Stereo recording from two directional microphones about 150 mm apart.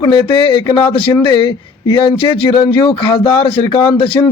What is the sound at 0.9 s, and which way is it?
A man's voice, 35° left (ahead or behind).